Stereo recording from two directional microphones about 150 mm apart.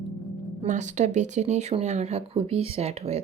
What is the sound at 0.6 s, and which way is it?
Speech, 55° right (ahead or behind).